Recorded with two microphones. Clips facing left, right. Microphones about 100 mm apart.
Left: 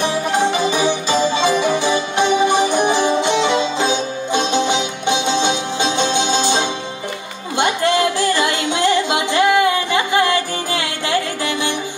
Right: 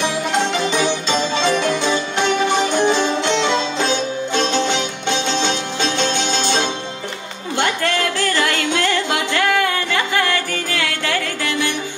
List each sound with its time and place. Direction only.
0.3 s music: 15° left (ahead or behind)